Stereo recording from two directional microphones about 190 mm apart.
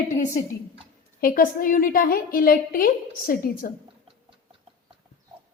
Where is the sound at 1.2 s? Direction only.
50° left (ahead or behind).